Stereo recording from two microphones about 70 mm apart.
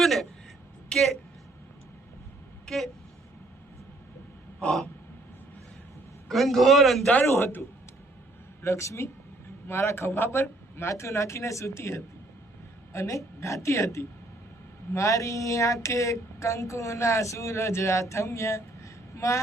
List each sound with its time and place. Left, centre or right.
0.0 s vehicle: centre
0.9 s a man's voice: centre
2.6 s vehicle: centre
4.6 s gasp: centre
6.2 s a man's voice: centre
7.1 s a man's voice: left
8.6 s a sound: left
9.6 s speech: left
12.9 s a sound: left
18.1 s a woman's voice: left